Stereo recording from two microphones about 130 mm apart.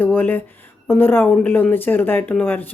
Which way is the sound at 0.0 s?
15° left (ahead or behind).